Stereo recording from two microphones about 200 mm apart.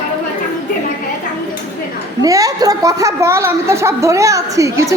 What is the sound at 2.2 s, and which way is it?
A woman's voice, 15° right (ahead or behind).